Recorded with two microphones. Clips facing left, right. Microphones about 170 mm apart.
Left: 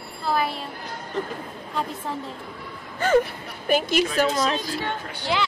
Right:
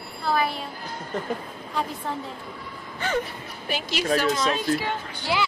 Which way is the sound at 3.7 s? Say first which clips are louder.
Left 3 dB; 50° left (ahead or behind).